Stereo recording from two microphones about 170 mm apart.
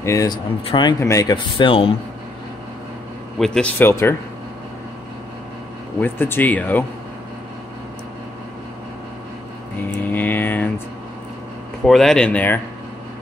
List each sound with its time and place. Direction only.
0.0 s speech: 20° left (ahead or behind); by 2.0 s 35° left (ahead or behind)
3.3 s speech: 5° left (ahead or behind)
5.9 s speech: 10° left (ahead or behind)
10.0 s a sound: 10° left (ahead or behind)
11.8 s speech: centre (ahead or behind)